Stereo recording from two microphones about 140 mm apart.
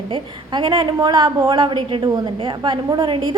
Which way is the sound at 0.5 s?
35° right (ahead or behind).